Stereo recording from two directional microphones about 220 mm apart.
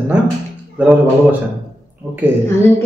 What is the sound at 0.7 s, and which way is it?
Speech, 5° right (ahead or behind).